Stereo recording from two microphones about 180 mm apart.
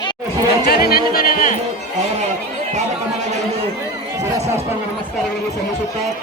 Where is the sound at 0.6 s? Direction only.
60° left (ahead or behind).